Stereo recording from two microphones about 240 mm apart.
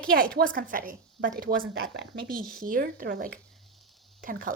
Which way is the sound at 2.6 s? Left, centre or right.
Right.